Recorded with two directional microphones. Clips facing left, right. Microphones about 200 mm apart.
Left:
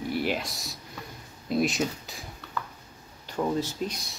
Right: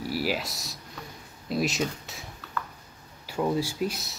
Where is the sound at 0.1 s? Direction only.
5° right (ahead or behind).